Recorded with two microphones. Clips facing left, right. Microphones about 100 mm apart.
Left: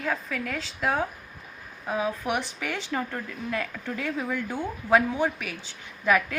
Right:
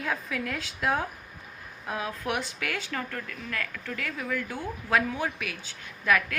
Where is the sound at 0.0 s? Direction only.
5° right (ahead or behind).